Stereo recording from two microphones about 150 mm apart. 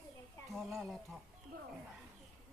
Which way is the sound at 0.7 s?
Centre (ahead or behind).